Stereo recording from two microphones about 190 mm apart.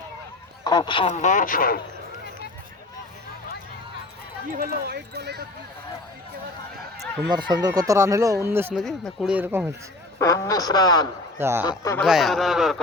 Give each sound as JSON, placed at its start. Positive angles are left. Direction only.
{"t": 0.6, "sound": "speech", "side_deg": 20}
{"t": 1.1, "sound": "speech", "side_deg": 40}
{"t": 4.5, "sound": "speech", "side_deg": -55}
{"t": 7.3, "sound": "speech", "side_deg": -25}
{"t": 8.7, "sound": "speech", "side_deg": 0}
{"t": 10.2, "sound": "speech", "side_deg": 15}
{"t": 11.3, "sound": "a man's voice", "side_deg": -10}
{"t": 11.8, "sound": "speech", "side_deg": 15}
{"t": 12.0, "sound": "speech", "side_deg": 0}